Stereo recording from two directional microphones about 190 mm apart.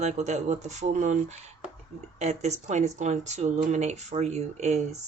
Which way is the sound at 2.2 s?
35° right (ahead or behind).